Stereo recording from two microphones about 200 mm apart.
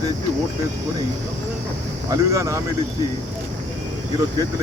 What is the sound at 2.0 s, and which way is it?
Speech, 15° right (ahead or behind).